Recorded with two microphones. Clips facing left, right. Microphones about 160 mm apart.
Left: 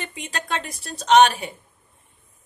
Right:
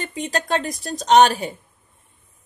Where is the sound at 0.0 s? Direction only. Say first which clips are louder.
Right 7 dB; 35° right (ahead or behind).